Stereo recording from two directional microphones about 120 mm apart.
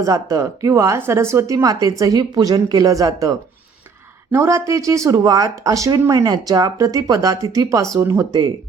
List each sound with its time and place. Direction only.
0.0 s a woman's voice: 30° right (ahead or behind)